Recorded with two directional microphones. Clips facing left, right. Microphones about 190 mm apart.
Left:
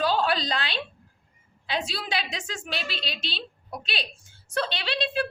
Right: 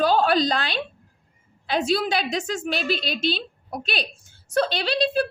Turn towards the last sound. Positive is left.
turn(degrees=-40)  # may be behind; listen again after turning